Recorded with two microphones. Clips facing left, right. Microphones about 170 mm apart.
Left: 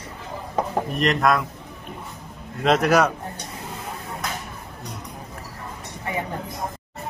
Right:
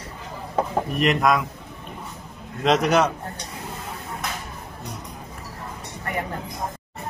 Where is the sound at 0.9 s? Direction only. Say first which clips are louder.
Even; centre (ahead or behind).